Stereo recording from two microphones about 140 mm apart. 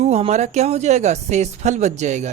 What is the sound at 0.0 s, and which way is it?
Speech, 50° right (ahead or behind).